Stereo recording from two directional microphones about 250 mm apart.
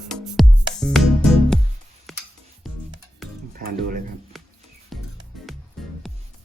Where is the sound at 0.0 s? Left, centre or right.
Centre.